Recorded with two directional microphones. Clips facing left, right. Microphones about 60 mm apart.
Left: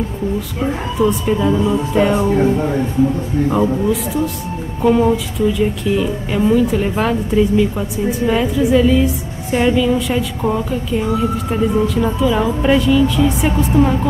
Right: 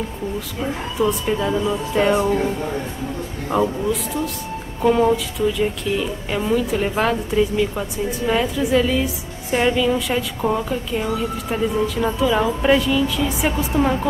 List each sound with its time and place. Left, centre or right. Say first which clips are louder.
0.9 s speech: left 4 dB; centre
2.3 s speech: left 6 dB; left
3.6 s speech: left 5 dB; centre